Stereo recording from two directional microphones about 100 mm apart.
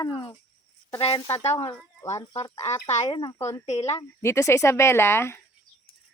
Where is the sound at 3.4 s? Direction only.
30° left (ahead or behind).